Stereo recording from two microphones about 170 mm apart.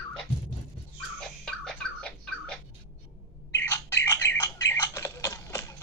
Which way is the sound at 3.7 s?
15° left (ahead or behind).